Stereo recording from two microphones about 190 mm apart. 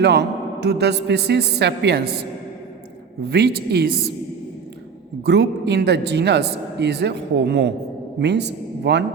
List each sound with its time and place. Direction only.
0.0 s a man's voice: 65° right (ahead or behind)
3.2 s a man's voice: 60° right (ahead or behind)
5.2 s a man's voice: 65° right (ahead or behind)